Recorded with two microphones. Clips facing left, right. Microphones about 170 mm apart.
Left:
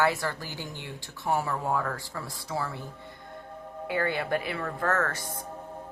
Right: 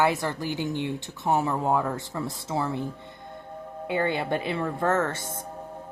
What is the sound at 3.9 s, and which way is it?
A woman's voice, 20° right (ahead or behind).